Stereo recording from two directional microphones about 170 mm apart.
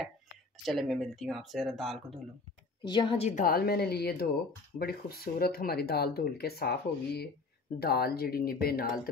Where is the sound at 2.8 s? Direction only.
30° left (ahead or behind).